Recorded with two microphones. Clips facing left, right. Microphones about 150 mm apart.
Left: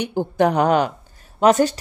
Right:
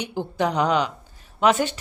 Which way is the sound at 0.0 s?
50° left (ahead or behind).